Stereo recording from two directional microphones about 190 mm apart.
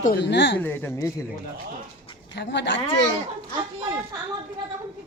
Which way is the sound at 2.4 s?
65° left (ahead or behind).